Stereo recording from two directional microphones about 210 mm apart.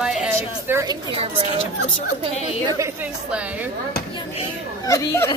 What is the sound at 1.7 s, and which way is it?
Speech, 90° left.